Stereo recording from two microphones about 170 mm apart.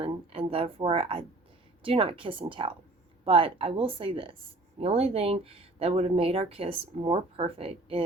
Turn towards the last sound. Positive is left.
turn(degrees=-35)  # may be behind; listen again after turning